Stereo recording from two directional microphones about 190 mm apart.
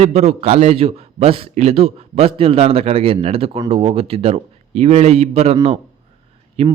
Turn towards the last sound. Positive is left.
turn(degrees=-30)  # may be behind; listen again after turning